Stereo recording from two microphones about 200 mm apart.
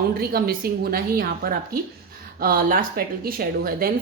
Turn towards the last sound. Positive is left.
turn(degrees=-45)  # may be behind; listen again after turning